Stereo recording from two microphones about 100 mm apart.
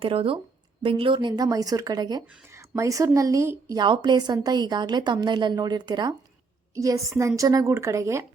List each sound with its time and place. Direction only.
0.0 s speech: 65° right (ahead or behind); by 1.5 s 50° right (ahead or behind)
1.5 s a woman's voice: 35° right (ahead or behind)
2.5 s speech: 30° right (ahead or behind)
3.8 s a woman's voice: 50° right (ahead or behind)
6.7 s a woman's voice: 30° right (ahead or behind)